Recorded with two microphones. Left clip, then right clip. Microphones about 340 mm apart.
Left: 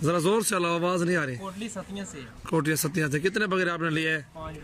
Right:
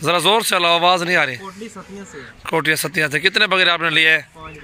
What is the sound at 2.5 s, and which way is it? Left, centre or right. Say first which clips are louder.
Speech: right 9 dB; centre.